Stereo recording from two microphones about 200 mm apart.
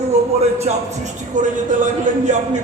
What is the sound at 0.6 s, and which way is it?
Speech, 35° right (ahead or behind).